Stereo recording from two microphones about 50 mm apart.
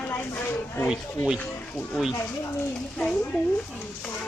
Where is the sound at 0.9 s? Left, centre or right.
Centre.